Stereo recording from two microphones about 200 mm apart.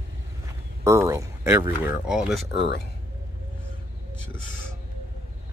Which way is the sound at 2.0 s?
5° right (ahead or behind).